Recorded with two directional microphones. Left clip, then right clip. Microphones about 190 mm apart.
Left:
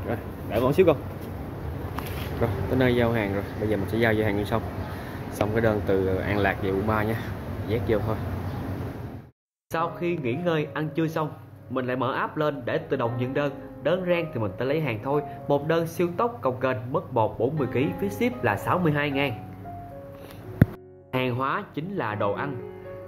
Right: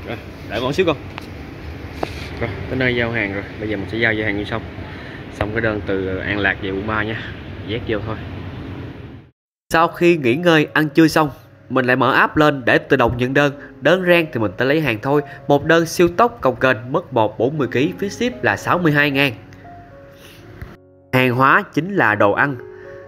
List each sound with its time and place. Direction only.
0.1 s speech: 5° left (ahead or behind)
2.4 s speech: centre (ahead or behind)
9.7 s a man's voice: 35° right (ahead or behind)
21.1 s a man's voice: 35° right (ahead or behind)